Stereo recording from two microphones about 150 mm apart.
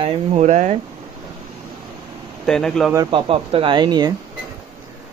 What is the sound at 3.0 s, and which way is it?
Speech, 35° right (ahead or behind).